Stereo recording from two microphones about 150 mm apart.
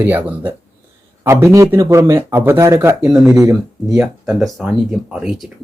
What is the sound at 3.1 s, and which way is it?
Speech, 5° right (ahead or behind).